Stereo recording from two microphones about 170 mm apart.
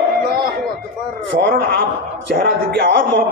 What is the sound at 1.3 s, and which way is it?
Speech, 90° right.